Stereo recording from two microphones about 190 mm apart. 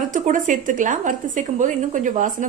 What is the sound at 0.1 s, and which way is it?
A woman's voice, 40° right (ahead or behind).